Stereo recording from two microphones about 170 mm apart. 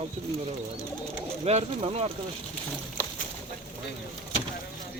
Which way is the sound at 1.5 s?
35° right (ahead or behind).